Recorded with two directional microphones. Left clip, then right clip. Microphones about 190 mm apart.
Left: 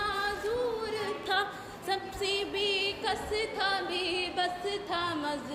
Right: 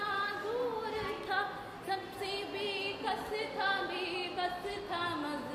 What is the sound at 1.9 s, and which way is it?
Music, 45° left (ahead or behind).